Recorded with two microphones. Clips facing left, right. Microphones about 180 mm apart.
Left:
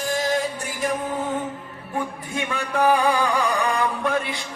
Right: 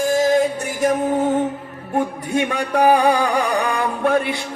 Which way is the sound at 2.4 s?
40° right (ahead or behind).